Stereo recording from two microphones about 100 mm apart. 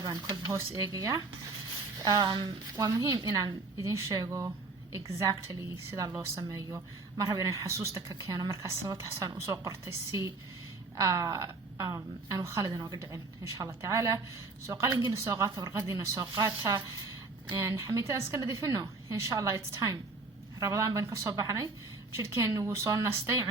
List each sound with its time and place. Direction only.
0.0 s speech: 45° right (ahead or behind)
0.5 s a woman's voice: 30° right (ahead or behind)